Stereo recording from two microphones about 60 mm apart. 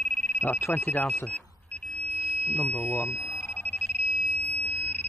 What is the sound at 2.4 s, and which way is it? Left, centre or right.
Alarm, left.